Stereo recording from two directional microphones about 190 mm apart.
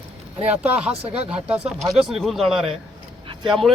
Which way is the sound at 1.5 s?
5° right (ahead or behind).